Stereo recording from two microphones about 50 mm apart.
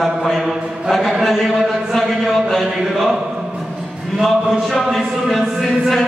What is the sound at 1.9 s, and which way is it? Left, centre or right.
Speech, centre.